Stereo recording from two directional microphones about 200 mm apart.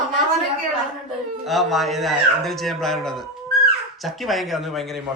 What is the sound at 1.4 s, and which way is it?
A man's voice, centre (ahead or behind).